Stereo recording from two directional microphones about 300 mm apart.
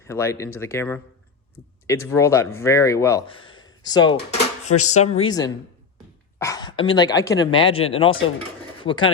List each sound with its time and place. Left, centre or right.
0.0 s speech: centre